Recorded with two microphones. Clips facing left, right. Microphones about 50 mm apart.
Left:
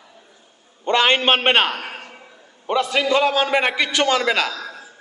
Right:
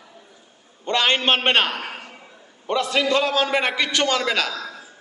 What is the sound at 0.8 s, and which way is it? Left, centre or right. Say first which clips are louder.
A man's voice: left 3 dB; centre.